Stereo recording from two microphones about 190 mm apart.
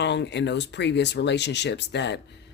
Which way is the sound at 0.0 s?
65° left (ahead or behind).